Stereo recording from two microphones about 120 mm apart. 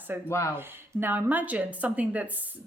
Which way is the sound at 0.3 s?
25° left (ahead or behind).